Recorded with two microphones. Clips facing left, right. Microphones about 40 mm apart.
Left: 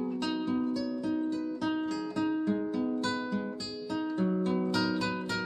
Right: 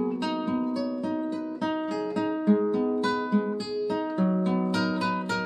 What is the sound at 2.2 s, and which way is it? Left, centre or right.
Music, centre.